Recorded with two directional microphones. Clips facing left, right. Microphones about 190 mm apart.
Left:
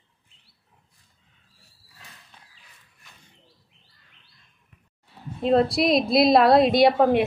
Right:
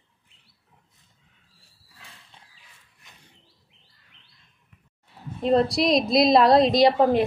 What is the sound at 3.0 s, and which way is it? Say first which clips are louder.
Bird: even; 20° right (ahead or behind).